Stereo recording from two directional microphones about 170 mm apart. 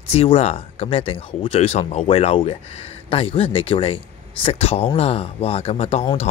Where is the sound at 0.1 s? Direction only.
35° left (ahead or behind).